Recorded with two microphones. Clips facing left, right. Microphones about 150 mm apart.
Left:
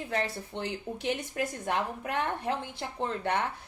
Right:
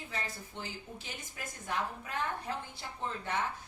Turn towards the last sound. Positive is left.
turn(degrees=65)  # may be behind; listen again after turning